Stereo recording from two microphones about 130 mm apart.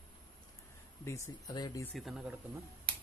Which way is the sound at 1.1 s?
25° left (ahead or behind).